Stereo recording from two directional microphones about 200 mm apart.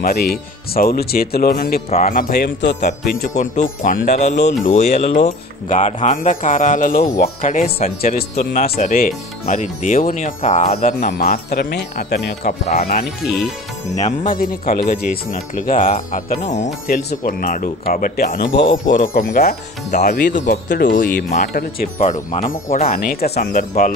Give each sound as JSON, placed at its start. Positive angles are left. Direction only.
{"t": 0.0, "sound": "speech", "side_deg": 50}
{"t": 1.9, "sound": "speech", "side_deg": 40}
{"t": 3.8, "sound": "speech", "side_deg": 40}
{"t": 12.4, "sound": "speech", "side_deg": 40}
{"t": 13.9, "sound": "speech", "side_deg": 40}
{"t": 16.8, "sound": "speech", "side_deg": 45}